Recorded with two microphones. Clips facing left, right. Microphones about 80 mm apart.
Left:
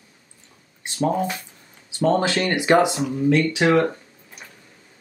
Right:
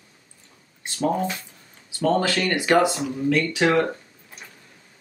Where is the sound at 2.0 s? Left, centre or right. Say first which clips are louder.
Left 2 dB; left.